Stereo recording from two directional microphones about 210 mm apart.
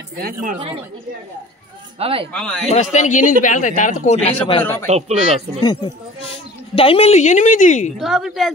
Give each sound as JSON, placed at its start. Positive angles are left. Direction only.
{"t": 0.2, "sound": "speech", "side_deg": -40}
{"t": 2.0, "sound": "speech", "side_deg": -25}
{"t": 2.3, "sound": "a woman's voice", "side_deg": 5}
{"t": 2.7, "sound": "speech", "side_deg": 35}
{"t": 4.8, "sound": "speech", "side_deg": -30}
{"t": 5.6, "sound": "a woman's voice", "side_deg": 20}
{"t": 8.0, "sound": "a woman's voice", "side_deg": 0}